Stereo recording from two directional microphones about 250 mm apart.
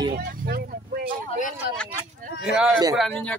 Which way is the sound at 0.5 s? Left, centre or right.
Right.